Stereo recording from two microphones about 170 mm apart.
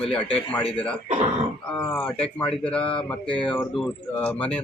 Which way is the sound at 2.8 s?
30° left (ahead or behind).